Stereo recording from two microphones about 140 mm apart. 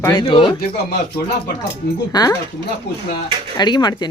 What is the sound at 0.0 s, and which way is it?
Speech, 25° left (ahead or behind).